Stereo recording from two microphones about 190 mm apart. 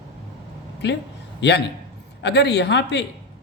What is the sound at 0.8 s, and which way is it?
A man's voice, 65° left (ahead or behind).